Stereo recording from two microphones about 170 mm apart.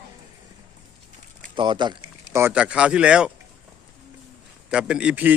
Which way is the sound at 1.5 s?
30° right (ahead or behind).